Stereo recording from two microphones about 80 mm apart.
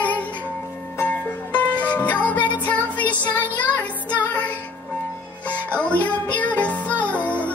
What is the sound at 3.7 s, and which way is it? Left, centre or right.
Music, left.